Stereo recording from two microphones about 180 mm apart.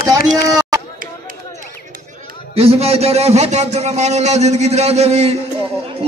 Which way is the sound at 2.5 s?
35° right (ahead or behind).